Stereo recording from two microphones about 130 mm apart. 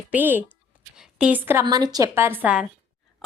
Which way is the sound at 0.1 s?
15° right (ahead or behind).